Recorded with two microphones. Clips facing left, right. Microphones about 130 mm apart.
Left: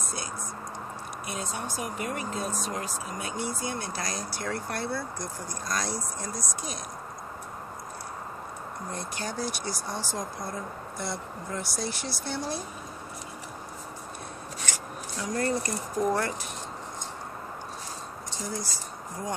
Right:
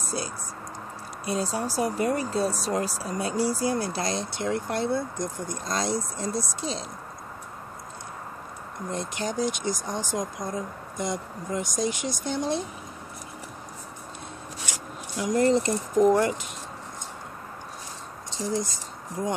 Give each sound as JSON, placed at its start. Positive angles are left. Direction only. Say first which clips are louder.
{"t": 0.0, "sound": "whispering", "louder": "right 5 dB", "side_deg": -30}
{"t": 1.2, "sound": "speech", "louder": "right 8 dB", "side_deg": -30}
{"t": 8.9, "sound": "speech", "louder": "right 6 dB", "side_deg": -20}
{"t": 14.7, "sound": "speech", "louder": "even", "side_deg": -15}
{"t": 18.3, "sound": "speech", "louder": "right 7 dB", "side_deg": -20}